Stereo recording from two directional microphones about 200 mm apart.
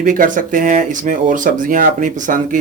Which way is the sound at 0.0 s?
40° right (ahead or behind).